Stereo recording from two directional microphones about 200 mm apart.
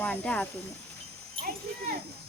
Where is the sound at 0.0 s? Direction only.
5° left (ahead or behind).